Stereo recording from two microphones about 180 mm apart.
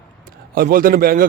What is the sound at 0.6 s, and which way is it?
Speech, 50° right (ahead or behind).